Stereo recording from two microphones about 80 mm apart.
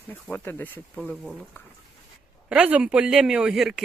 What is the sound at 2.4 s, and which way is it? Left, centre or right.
A woman's voice, centre.